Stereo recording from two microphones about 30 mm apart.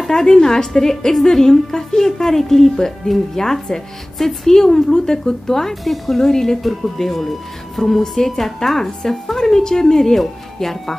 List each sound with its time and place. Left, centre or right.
0.1 s a woman's voice: centre
5.9 s speech: centre
6.2 s speech: centre
6.6 s speech: centre